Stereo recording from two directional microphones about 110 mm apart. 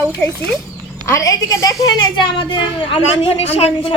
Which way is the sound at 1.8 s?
45° left (ahead or behind).